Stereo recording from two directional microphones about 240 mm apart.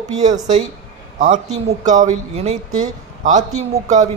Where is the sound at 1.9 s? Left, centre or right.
Right.